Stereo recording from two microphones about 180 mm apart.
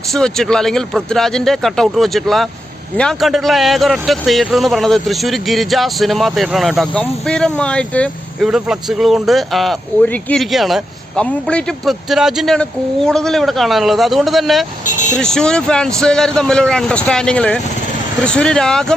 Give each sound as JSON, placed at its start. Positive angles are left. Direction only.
{"t": 0.1, "sound": "speech", "side_deg": 5}
{"t": 14.8, "sound": "speech", "side_deg": 45}
{"t": 15.2, "sound": "speech", "side_deg": 5}